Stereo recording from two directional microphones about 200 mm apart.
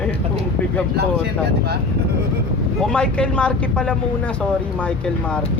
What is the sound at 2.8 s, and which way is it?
Speech, 5° left (ahead or behind).